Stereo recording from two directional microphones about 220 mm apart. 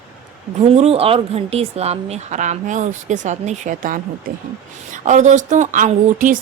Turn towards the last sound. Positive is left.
turn(degrees=-35)  # may be behind; listen again after turning